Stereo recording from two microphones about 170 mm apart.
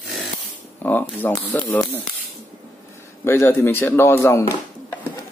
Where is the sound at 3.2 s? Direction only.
15° left (ahead or behind).